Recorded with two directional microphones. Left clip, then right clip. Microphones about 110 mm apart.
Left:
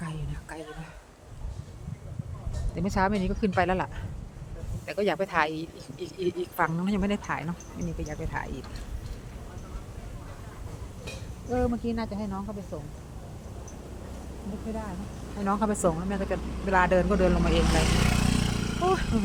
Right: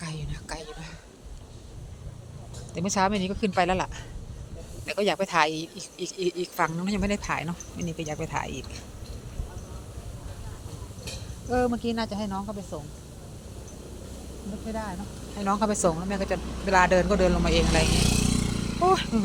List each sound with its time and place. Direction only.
0.0 s a sound: 20° left (ahead or behind)
2.7 s speech: 10° left (ahead or behind)
4.9 s speech: 20° left (ahead or behind)
7.3 s speech: 5° left (ahead or behind)
8.0 s speech: 20° right (ahead or behind)
11.5 s speech: centre (ahead or behind)
14.7 s speech: 5° right (ahead or behind)
15.4 s speech: 10° left (ahead or behind)
15.9 s speech: 5° left (ahead or behind)
18.1 s a sound: 25° right (ahead or behind)
18.4 s vehicle: centre (ahead or behind)